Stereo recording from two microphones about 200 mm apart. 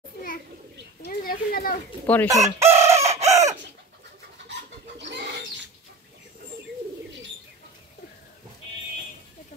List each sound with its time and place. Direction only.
1.0 s children playing: 45° left (ahead or behind)
2.2 s chicken: 15° right (ahead or behind)
4.5 s bird: 60° right (ahead or behind)